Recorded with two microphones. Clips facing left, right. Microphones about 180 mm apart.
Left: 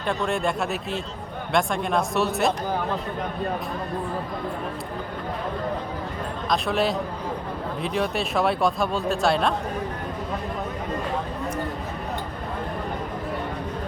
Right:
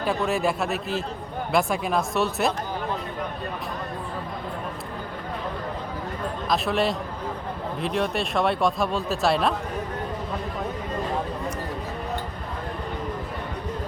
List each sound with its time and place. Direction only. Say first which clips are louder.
0.0 s speech: right 1 dB; 5° right (ahead or behind)
6.5 s speech: left 1 dB; centre (ahead or behind)